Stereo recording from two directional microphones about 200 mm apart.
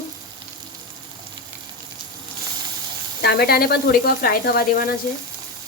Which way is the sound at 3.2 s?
55° left (ahead or behind).